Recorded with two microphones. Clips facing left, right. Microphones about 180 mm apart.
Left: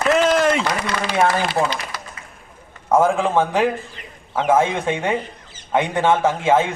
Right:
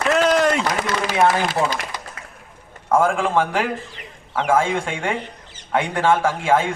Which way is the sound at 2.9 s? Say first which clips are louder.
Left 2 dB; 20° left (ahead or behind).